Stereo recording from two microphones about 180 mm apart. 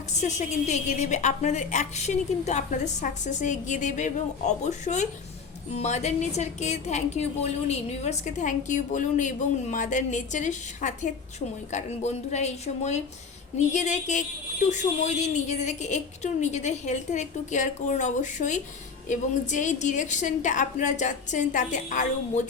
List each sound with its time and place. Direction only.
0.2 s a woman's voice: 40° left (ahead or behind)